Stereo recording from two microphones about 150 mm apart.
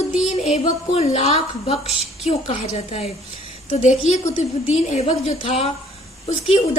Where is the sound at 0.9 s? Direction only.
45° left (ahead or behind).